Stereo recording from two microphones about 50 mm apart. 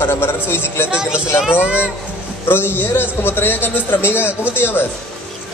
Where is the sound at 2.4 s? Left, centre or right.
Left.